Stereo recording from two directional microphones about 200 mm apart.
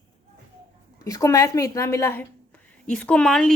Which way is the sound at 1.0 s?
15° left (ahead or behind).